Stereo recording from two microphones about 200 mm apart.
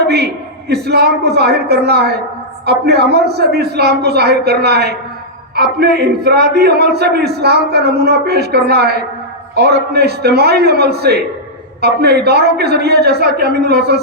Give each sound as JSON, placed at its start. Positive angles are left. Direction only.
{"t": 0.7, "sound": "a man's voice", "side_deg": -55}